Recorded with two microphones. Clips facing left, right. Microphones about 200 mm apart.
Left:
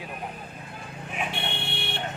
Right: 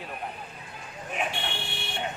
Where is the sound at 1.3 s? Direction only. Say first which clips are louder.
Left 2 dB; 60° left (ahead or behind).